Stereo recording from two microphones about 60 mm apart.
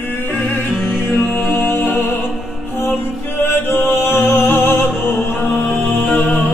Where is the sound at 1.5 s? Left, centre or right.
Left.